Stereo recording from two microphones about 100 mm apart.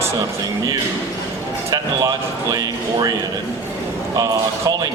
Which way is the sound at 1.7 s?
40° right (ahead or behind).